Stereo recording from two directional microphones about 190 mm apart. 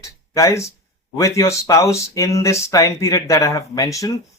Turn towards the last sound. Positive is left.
turn(degrees=15)  # may be behind; listen again after turning